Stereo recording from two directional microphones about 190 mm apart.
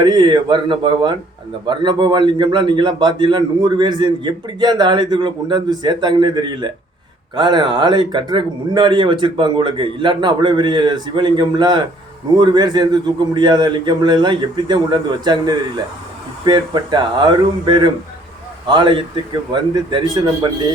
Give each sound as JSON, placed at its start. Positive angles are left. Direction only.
{"t": 0.0, "sound": "a man's voice", "side_deg": -25}